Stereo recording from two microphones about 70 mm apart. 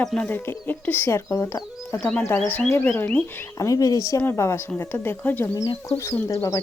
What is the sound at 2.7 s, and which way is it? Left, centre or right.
Speech, left.